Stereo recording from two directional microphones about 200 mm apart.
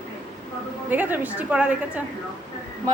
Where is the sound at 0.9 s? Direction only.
10° right (ahead or behind).